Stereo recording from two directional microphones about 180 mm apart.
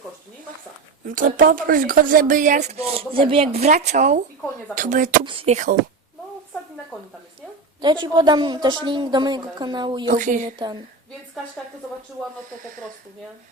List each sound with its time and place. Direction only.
1.0 s speech: 45° right (ahead or behind)
5.2 s speech: 30° right (ahead or behind)
7.8 s a woman's voice: 25° right (ahead or behind)
10.1 s speech: 45° right (ahead or behind)